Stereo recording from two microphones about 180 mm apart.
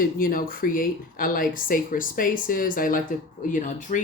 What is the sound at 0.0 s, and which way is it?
Speech, 50° left (ahead or behind).